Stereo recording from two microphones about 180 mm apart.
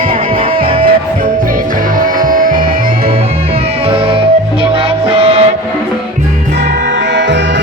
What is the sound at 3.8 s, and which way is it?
Music, 30° right (ahead or behind).